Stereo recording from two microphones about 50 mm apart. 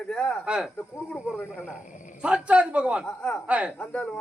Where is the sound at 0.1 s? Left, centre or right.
Centre.